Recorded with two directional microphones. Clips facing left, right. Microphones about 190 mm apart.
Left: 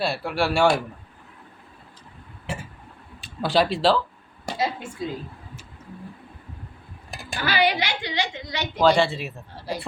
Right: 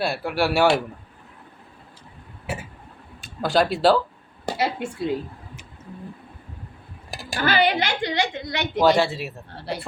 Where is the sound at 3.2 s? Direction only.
Centre (ahead or behind).